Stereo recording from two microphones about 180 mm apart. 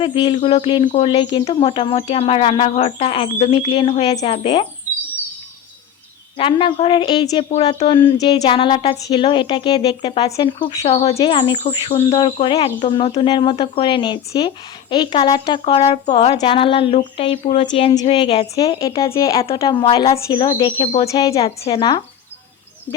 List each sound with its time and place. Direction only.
0.0 s speech: 30° left (ahead or behind)
6.3 s speech: 30° left (ahead or behind)
7.5 s speech: 35° left (ahead or behind)
21.2 s speech: 35° left (ahead or behind)